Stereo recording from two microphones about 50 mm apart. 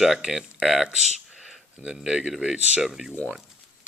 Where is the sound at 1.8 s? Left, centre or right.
Centre.